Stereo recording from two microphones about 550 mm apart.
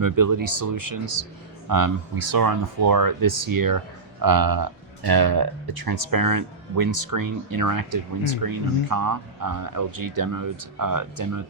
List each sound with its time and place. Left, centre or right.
0.0 s speech: right